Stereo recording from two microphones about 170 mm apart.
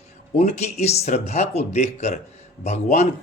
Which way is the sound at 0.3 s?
45° left (ahead or behind).